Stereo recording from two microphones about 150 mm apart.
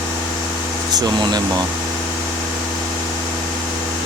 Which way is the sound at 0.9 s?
25° right (ahead or behind).